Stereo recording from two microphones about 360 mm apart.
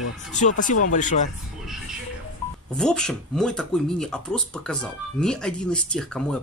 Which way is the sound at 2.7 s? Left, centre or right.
Centre.